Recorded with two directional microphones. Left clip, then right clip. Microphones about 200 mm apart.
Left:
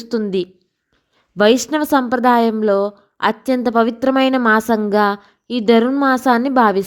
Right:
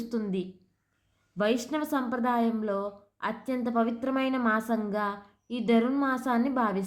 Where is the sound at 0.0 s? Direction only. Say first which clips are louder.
Left 13 dB; 40° left (ahead or behind).